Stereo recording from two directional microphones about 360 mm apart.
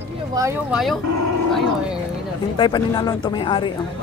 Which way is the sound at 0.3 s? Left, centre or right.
Centre.